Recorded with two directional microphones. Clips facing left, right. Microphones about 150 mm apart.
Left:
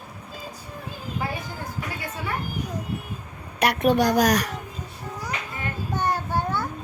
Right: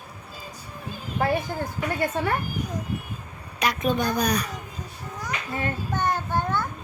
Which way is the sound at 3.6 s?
65° left (ahead or behind).